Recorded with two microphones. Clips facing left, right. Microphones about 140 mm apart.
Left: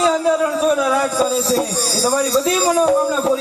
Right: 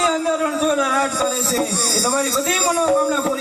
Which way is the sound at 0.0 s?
15° left (ahead or behind).